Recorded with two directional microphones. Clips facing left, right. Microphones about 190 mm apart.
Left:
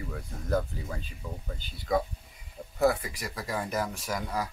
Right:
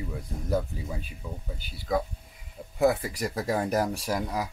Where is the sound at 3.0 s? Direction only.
40° right (ahead or behind).